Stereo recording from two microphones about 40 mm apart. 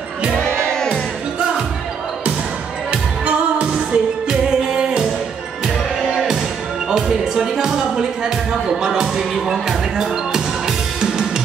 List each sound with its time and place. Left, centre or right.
0.7 s music: centre
2.9 s music: right
4.6 s music: centre
6.1 s music: centre